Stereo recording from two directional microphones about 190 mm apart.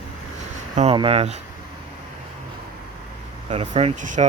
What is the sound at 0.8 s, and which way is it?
Speech, 30° right (ahead or behind).